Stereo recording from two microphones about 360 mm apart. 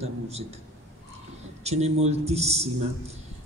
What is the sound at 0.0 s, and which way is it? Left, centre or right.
Speech, centre.